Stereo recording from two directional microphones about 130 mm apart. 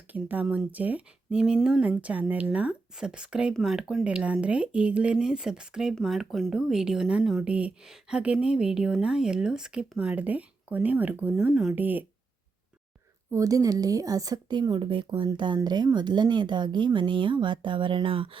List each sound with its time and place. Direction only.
0.1 s speech: 15° right (ahead or behind)
13.3 s speech: 25° right (ahead or behind); by 18.3 s 45° right (ahead or behind)